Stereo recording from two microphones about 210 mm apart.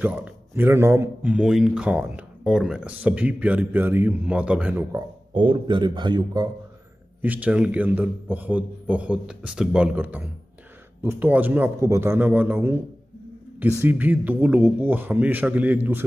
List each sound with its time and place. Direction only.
0.0 s speech: 10° right (ahead or behind)
5.3 s a man's voice: 25° right (ahead or behind)
7.2 s speech: 10° right (ahead or behind)
13.8 s speech: 10° right (ahead or behind)